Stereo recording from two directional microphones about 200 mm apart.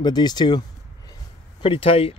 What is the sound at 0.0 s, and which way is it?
Speech, 20° left (ahead or behind).